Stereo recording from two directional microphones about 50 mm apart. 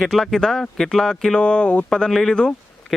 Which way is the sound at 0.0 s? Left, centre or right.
Centre.